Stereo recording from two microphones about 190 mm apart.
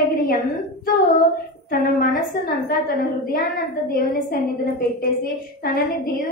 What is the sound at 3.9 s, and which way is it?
A woman's voice, 50° left (ahead or behind).